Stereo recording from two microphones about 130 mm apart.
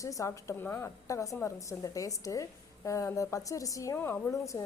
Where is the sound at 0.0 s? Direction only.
25° left (ahead or behind).